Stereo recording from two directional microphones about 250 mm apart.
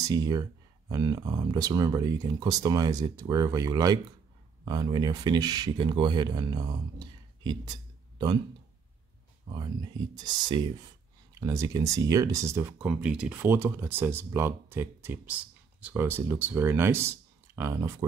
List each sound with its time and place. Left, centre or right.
0.1 s speech: centre
10.1 s speech: centre